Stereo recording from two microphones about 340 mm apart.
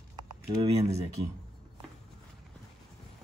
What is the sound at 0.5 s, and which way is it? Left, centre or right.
Speech, centre.